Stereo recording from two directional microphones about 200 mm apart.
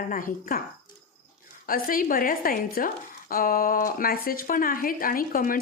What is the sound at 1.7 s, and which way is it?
A woman's voice, 45° left (ahead or behind).